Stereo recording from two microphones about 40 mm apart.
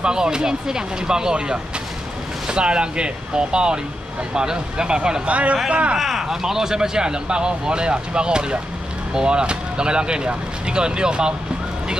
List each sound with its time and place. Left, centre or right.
0.0 s speech: centre
5.9 s speech: centre
6.4 s speech: centre